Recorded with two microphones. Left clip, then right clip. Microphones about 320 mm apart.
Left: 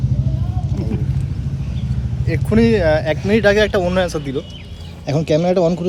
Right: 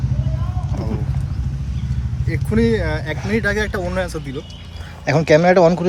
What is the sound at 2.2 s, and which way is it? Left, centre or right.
Speech, centre.